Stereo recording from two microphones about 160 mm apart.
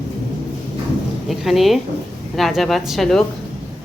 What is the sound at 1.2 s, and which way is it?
Speech, centre (ahead or behind).